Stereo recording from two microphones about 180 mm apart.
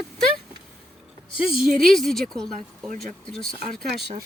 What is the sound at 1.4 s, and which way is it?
Speech, 5° right (ahead or behind).